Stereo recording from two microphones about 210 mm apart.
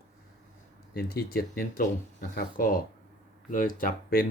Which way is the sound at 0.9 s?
50° left (ahead or behind).